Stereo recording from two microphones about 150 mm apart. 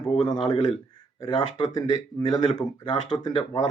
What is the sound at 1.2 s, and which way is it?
Speech, 30° left (ahead or behind).